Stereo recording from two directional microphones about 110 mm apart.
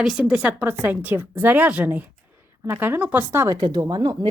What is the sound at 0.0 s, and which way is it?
A woman's voice, 10° right (ahead or behind).